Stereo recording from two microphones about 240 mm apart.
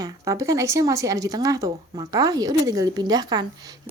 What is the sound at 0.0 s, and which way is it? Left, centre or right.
Speech, centre.